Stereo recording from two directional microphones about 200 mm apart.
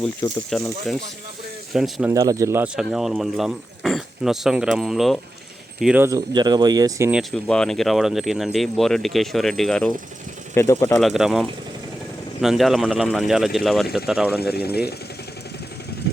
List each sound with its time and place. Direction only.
0.5 s speech: centre (ahead or behind)
2.1 s speech: 15° right (ahead or behind)
2.7 s speech: centre (ahead or behind)
6.1 s speech: 20° right (ahead or behind)
7.1 s speech: centre (ahead or behind)
14.4 s speech: 50° left (ahead or behind)